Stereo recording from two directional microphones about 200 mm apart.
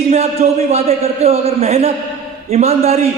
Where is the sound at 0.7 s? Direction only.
30° right (ahead or behind).